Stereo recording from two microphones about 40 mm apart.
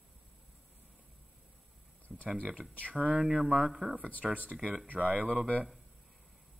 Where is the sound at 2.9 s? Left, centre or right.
Right.